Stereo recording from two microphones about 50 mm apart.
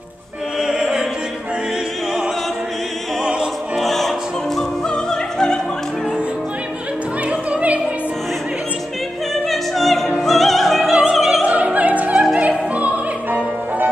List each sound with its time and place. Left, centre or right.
0.6 s opera: centre
3.7 s opera: centre
4.6 s music: centre
7.2 s opera: right
9.3 s opera: centre
10.2 s music: centre
11.4 s music: right